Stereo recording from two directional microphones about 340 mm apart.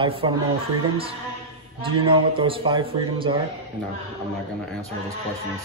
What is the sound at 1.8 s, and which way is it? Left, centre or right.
Speech, centre.